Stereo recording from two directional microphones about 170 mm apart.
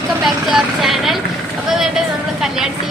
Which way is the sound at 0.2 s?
Centre (ahead or behind).